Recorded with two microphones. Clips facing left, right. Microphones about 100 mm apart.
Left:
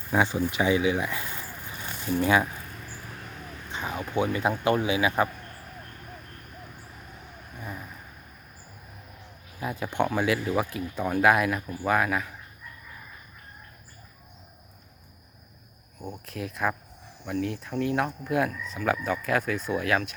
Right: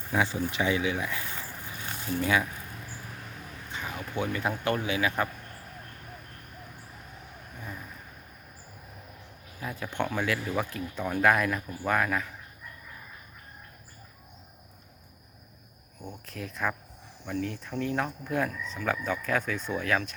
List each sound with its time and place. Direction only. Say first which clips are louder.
0.1 s speech: left 3 dB; 25° left (ahead or behind)
3.7 s a man's voice: left 4 dB; 25° left (ahead or behind)
7.6 s vehicle: left 3 dB; 15° left (ahead or behind)
9.6 s speech: left 5 dB; 20° left (ahead or behind)
16.0 s a sound: left 4 dB; 5° left (ahead or behind)
17.3 s speech: left 3 dB; 5° left (ahead or behind)